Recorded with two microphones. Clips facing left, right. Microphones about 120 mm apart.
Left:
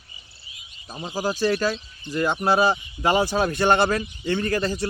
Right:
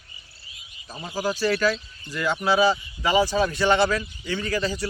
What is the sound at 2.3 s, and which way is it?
Speech, 50° left (ahead or behind).